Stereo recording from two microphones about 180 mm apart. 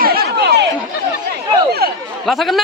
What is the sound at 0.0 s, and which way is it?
Chatter, 60° right (ahead or behind).